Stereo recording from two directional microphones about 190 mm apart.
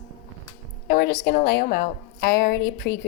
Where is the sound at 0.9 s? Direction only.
55° left (ahead or behind).